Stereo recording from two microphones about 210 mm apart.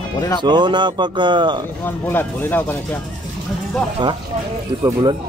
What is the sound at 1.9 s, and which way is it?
Speech, 10° left (ahead or behind).